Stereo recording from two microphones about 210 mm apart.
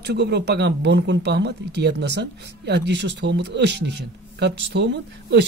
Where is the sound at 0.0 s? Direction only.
55° right (ahead or behind).